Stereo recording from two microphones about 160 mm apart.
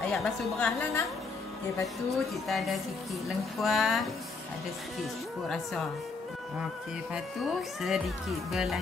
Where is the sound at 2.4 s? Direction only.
Centre (ahead or behind).